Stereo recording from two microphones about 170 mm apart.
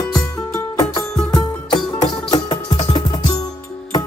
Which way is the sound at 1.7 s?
25° left (ahead or behind).